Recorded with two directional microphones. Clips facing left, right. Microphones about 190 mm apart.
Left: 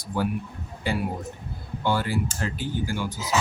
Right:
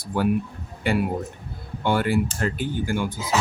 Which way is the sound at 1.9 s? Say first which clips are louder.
Right 4 dB; 60° right (ahead or behind).